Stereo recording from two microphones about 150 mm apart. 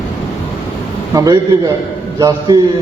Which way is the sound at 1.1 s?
20° right (ahead or behind).